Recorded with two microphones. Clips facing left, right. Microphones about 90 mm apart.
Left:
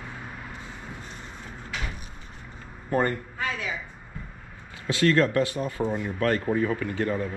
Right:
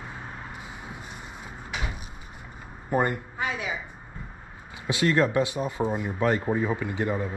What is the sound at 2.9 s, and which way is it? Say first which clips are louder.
Speech: even; 15° right (ahead or behind).